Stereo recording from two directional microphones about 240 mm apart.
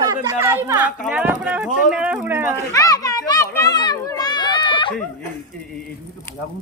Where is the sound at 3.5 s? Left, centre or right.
Centre.